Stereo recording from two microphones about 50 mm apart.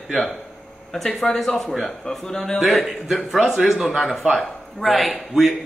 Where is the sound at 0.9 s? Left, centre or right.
Centre.